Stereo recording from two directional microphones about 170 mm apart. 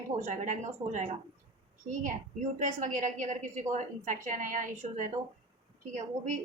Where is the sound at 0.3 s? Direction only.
50° right (ahead or behind).